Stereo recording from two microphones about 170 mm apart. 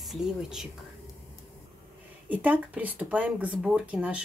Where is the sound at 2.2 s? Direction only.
10° right (ahead or behind).